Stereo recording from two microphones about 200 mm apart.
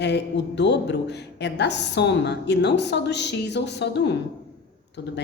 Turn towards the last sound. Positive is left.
turn(degrees=60)  # may be behind; listen again after turning